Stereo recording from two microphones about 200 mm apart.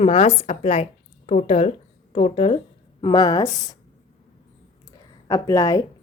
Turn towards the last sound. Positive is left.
turn(degrees=15)  # may be behind; listen again after turning